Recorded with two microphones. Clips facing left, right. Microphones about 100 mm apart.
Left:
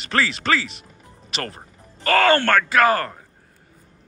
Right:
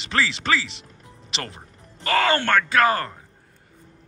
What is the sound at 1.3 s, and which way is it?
Speech, 20° right (ahead or behind).